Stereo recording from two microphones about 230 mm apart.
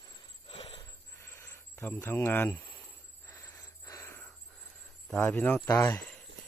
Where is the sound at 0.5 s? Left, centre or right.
Left.